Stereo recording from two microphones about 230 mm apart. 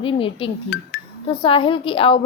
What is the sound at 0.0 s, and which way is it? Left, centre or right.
A woman's voice, left.